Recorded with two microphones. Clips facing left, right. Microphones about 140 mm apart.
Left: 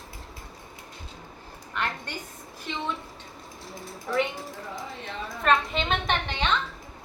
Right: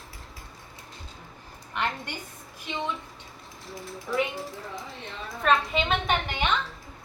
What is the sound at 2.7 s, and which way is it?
Speech, 20° right (ahead or behind).